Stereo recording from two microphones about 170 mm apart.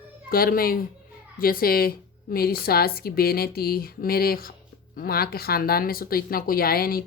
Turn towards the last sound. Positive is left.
turn(degrees=60)  # may be behind; listen again after turning